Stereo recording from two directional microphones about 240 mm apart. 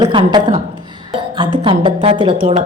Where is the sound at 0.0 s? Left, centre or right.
Centre.